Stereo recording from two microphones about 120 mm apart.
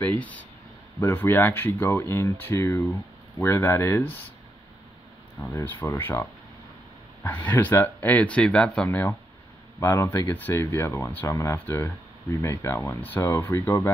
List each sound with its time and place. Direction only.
0.2 s speech: 10° left (ahead or behind)
5.4 s speech: 20° left (ahead or behind)
7.2 s speech: 15° left (ahead or behind)